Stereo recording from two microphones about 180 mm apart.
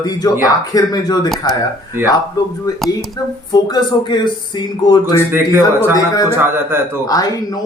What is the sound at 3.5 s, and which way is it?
Speech, 25° left (ahead or behind).